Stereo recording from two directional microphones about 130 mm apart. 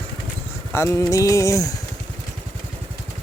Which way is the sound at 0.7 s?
20° left (ahead or behind).